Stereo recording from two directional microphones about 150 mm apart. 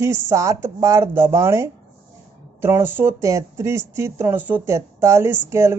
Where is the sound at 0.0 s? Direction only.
20° right (ahead or behind).